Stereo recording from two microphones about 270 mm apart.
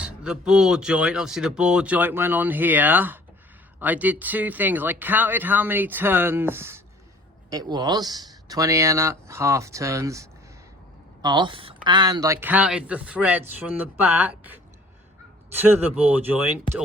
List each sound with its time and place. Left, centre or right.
0.0 s speech: centre